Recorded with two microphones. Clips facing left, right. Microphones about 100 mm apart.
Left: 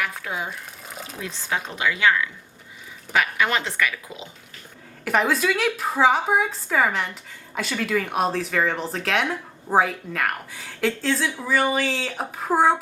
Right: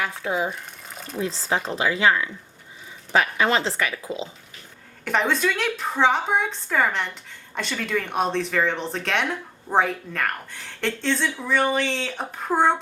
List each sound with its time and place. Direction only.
0.0 s a woman's voice: 25° right (ahead or behind)
0.9 s a sound: 5° left (ahead or behind)
1.2 s a woman's voice: 30° right (ahead or behind)
5.0 s a woman's voice: 5° left (ahead or behind)